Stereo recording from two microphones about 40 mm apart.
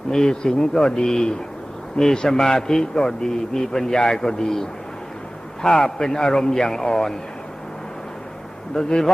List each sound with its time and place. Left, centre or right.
0.1 s speech: centre
8.7 s speech: centre